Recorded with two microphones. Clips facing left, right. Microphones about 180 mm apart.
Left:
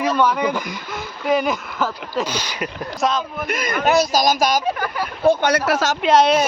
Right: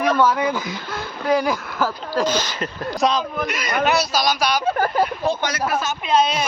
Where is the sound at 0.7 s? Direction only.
Centre (ahead or behind).